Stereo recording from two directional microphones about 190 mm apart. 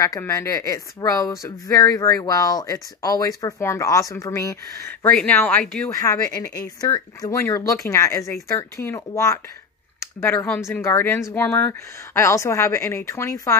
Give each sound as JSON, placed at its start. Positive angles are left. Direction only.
{"t": 0.0, "sound": "speech", "side_deg": 15}